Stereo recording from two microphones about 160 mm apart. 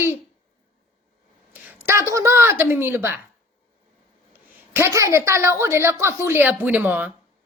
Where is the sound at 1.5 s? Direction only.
15° right (ahead or behind).